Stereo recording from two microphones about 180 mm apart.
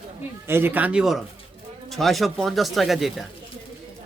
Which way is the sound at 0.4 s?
10° right (ahead or behind).